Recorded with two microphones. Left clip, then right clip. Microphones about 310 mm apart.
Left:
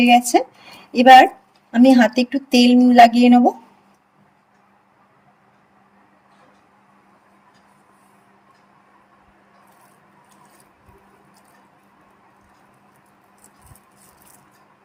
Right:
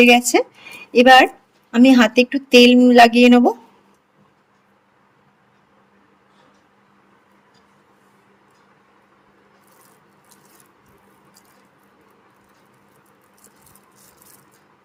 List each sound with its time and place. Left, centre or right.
0.0 s speech: centre